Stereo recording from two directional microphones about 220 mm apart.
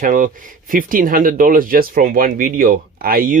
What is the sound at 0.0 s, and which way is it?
Speech, 40° right (ahead or behind).